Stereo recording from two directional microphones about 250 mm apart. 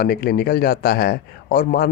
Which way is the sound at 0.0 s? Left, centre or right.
Left.